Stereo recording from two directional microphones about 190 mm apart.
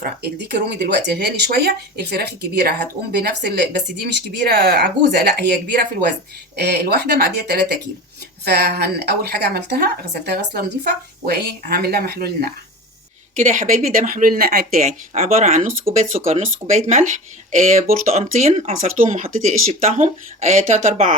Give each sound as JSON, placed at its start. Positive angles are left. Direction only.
{"t": 0.0, "sound": "a woman's voice", "side_deg": -60}
{"t": 13.3, "sound": "speech", "side_deg": -45}
{"t": 14.8, "sound": "speech", "side_deg": -40}